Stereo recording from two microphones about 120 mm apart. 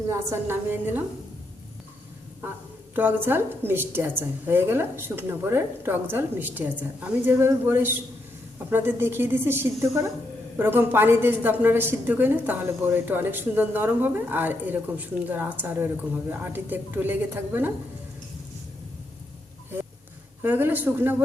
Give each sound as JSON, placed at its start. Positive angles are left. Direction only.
{"t": 0.1, "sound": "a woman's voice", "side_deg": -20}
{"t": 2.9, "sound": "a woman's voice", "side_deg": -15}
{"t": 20.4, "sound": "a woman's voice", "side_deg": -15}